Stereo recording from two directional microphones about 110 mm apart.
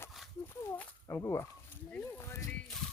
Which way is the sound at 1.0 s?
25° left (ahead or behind).